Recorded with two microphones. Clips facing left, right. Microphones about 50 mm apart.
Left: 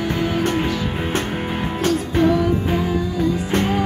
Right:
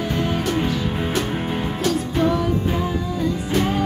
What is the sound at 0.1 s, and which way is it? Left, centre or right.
Music, centre.